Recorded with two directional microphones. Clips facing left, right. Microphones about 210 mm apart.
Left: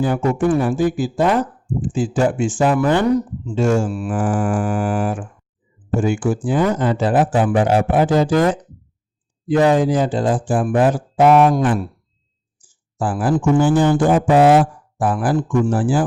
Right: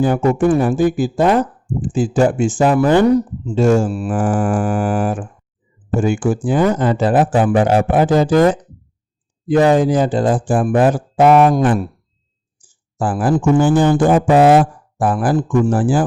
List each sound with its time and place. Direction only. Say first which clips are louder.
0.0 s speech: right 3 dB; 45° right (ahead or behind)
9.5 s speech: right 2 dB; 45° right (ahead or behind)
13.0 s speech: right 2 dB; 50° right (ahead or behind)